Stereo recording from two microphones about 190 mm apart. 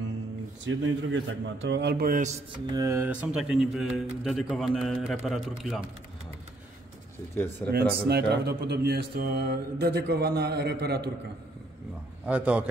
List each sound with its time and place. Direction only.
0.7 s speech: 75° right (ahead or behind); by 2.4 s 40° right (ahead or behind)
2.5 s speech: 20° right (ahead or behind); by 5.8 s centre (ahead or behind)
7.7 s speech: 60° right (ahead or behind)
12.3 s a man's voice: 5° right (ahead or behind)